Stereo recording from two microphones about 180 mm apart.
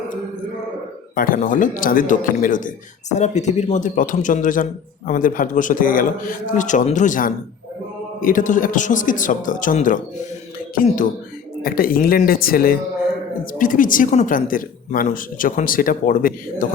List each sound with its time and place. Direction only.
1.1 s a man's voice: 50° left (ahead or behind)